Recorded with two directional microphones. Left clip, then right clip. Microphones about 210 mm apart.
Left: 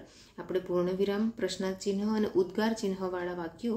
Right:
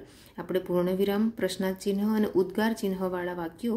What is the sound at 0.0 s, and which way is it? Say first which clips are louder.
A woman's voice: right 4 dB; 30° right (ahead or behind).